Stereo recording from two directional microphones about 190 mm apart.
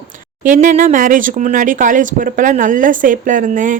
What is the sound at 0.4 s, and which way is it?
Speech, 40° right (ahead or behind).